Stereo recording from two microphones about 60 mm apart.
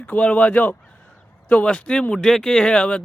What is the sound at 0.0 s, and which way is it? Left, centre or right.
Speech, left.